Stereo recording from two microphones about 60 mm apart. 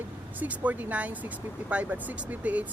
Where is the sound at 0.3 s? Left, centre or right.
Right.